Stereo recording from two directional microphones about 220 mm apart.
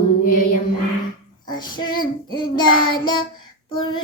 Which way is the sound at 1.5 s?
20° left (ahead or behind).